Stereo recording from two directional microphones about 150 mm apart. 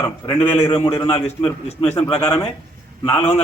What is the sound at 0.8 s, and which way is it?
Speech, 20° left (ahead or behind).